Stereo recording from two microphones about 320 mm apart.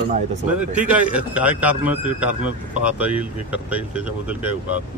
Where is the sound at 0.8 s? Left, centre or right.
Centre.